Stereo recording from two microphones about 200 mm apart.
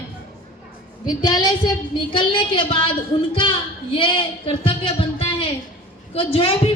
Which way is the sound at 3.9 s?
25° left (ahead or behind).